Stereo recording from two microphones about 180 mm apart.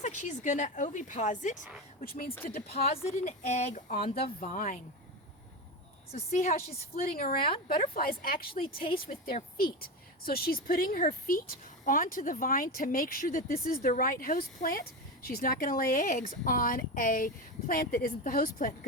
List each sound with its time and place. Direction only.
0.0 s speech: 45° left (ahead or behind)
2.0 s a woman's voice: 55° left (ahead or behind)
2.8 s a woman's voice: 35° left (ahead or behind)
4.1 s speech: 55° left (ahead or behind)
6.1 s a woman's voice: 40° left (ahead or behind)
6.7 s a woman's voice: 55° left (ahead or behind)
7.4 s a woman's voice: 30° left (ahead or behind)
7.8 s a woman's voice: 55° left (ahead or behind)